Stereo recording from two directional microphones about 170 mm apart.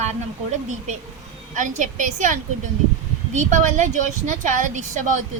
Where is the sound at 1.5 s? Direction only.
45° right (ahead or behind).